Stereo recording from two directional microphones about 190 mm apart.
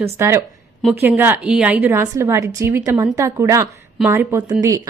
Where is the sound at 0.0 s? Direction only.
15° right (ahead or behind).